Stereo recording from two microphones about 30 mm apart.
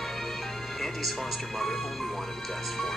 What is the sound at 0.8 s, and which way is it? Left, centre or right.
Speech, centre.